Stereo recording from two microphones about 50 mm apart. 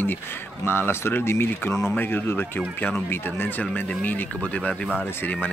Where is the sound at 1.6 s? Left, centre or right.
Left.